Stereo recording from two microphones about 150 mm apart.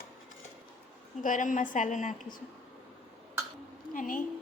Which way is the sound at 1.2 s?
60° left (ahead or behind).